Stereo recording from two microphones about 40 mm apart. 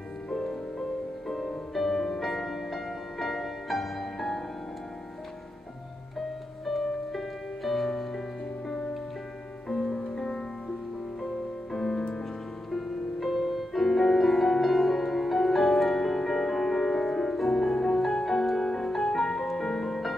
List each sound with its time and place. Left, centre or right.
0.3 s music: centre
6.1 s music: centre
9.7 s music: centre
11.7 s music: centre
12.7 s music: centre